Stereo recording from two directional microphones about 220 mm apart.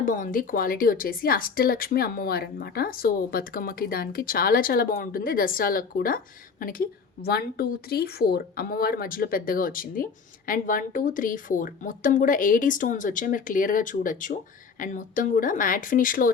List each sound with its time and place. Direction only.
0.0 s speech: 40° left (ahead or behind)